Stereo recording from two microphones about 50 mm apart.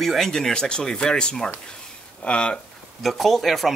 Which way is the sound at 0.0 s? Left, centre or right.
Centre.